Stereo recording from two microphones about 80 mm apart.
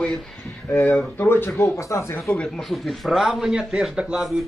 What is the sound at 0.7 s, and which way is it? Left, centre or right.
Speech, centre.